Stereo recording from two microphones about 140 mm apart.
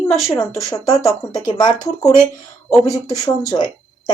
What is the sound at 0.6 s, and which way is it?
Speech, 25° left (ahead or behind).